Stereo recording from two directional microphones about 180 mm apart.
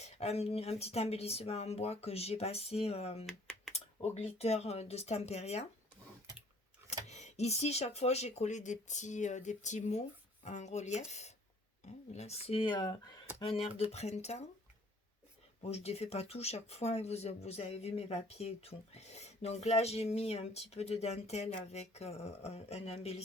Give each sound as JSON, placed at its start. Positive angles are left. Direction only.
{"t": 0.0, "sound": "speech", "side_deg": 35}
{"t": 7.1, "sound": "speech", "side_deg": 40}
{"t": 15.7, "sound": "speech", "side_deg": 35}